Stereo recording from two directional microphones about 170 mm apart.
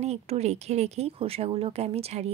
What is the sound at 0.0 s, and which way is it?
Speech, 40° right (ahead or behind).